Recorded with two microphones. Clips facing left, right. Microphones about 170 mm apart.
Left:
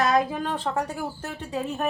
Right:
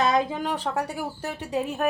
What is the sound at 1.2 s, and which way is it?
Speech, 15° right (ahead or behind).